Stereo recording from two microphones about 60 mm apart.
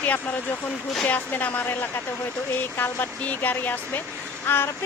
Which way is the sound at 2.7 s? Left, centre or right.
Left.